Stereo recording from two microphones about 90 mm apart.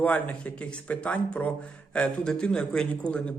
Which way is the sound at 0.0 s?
15° left (ahead or behind).